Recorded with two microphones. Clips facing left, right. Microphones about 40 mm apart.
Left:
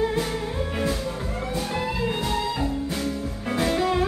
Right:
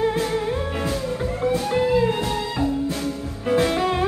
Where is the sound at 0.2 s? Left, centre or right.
Centre.